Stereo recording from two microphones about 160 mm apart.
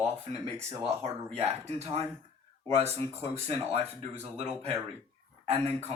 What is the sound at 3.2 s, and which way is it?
Speech, 40° right (ahead or behind).